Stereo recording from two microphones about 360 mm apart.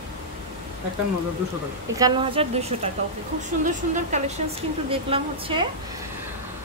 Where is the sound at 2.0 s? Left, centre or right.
Centre.